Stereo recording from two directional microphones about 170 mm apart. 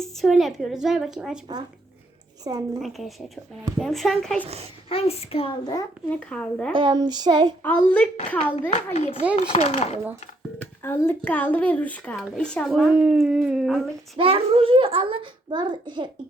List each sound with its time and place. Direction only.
0.0 s a woman's voice: centre (ahead or behind)
2.4 s a sound: 25° right (ahead or behind)
2.8 s speech: centre (ahead or behind)
4.4 s a child's voice: 35° right (ahead or behind)
4.9 s speech: 35° left (ahead or behind)
6.1 s a child's voice: 10° left (ahead or behind)
6.7 s a sound: 25° right (ahead or behind)
7.6 s a child's voice: 10° left (ahead or behind)
8.7 s speech: 35° left (ahead or behind)
10.6 s a child's voice: 15° left (ahead or behind); by 13.8 s 5° right (ahead or behind)
14.2 s a child's voice: 35° right (ahead or behind)